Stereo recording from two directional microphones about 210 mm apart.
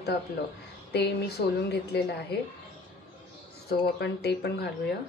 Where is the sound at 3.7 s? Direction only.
50° left (ahead or behind).